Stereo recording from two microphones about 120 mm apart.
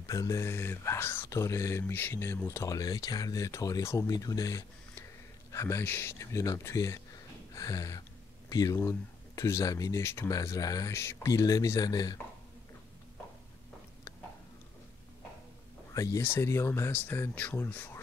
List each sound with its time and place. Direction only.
0.0 s speech: 30° left (ahead or behind)
15.9 s speech: 30° left (ahead or behind)